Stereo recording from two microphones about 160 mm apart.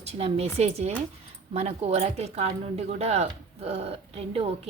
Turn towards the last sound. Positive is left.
turn(degrees=-40)  # may be behind; listen again after turning